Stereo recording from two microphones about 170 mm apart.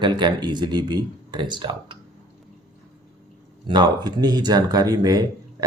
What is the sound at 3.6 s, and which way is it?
Speech, 25° right (ahead or behind).